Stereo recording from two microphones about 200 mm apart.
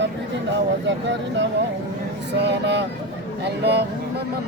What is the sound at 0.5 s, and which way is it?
Speech, 65° right (ahead or behind).